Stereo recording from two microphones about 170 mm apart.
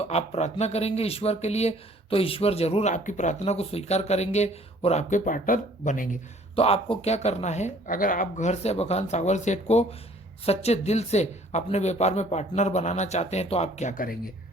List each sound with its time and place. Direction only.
0.0 s speech: 40° left (ahead or behind)
6.6 s speech: 35° left (ahead or behind); by 14.2 s 55° left (ahead or behind)